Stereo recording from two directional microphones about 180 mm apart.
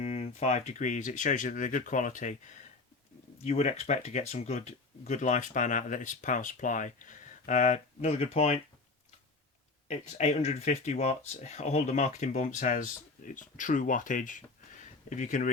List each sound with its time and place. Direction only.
0.0 s speech: 40° left (ahead or behind)
9.9 s speech: 40° left (ahead or behind)